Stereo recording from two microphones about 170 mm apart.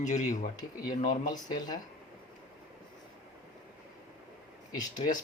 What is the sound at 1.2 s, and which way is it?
Speech, 25° left (ahead or behind).